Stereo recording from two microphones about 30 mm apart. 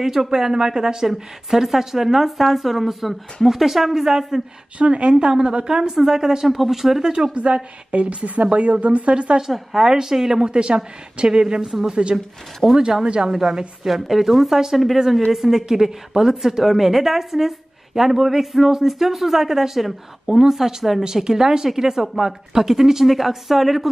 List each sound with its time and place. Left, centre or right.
0.0 s speech: centre
4.7 s a woman's voice: right
5.2 s speech: right
5.9 s speech: centre
7.3 s a woman's voice: right
9.4 s speech: centre
10.4 s a woman's voice: right
11.6 s speech: centre
11.9 s a woman's voice: right
12.6 s speech: centre
13.0 s speech: right
13.3 s speech: centre
16.6 s speech: centre
21.0 s speech: right; by 23.9 s centre